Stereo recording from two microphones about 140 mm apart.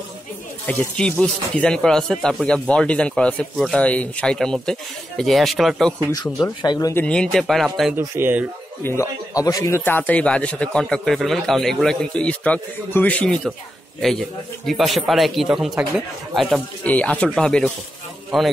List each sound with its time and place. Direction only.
0.7 s speech: 5° left (ahead or behind)
6.1 s speech: 25° left (ahead or behind)
6.9 s speech: 10° left (ahead or behind)
8.0 s speech: 15° right (ahead or behind)
8.8 s speech: 20° left (ahead or behind)
14.7 s speech: centre (ahead or behind)
16.8 s speech: 10° left (ahead or behind)